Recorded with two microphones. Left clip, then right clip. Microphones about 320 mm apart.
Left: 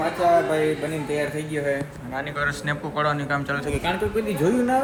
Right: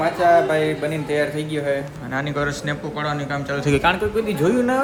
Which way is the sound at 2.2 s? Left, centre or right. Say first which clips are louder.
Left 1 dB; centre.